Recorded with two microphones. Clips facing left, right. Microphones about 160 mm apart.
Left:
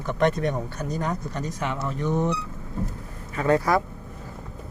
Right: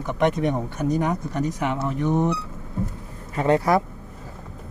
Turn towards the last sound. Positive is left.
turn(degrees=-20)  # may be behind; listen again after turning